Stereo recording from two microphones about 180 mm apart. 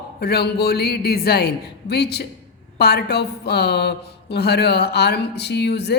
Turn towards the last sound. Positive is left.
turn(degrees=65)  # may be behind; listen again after turning